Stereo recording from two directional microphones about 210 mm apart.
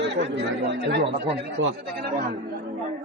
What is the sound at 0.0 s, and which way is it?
A man's voice, 55° right (ahead or behind).